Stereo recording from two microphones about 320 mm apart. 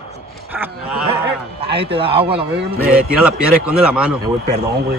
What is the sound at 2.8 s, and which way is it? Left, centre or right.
A man's voice, centre.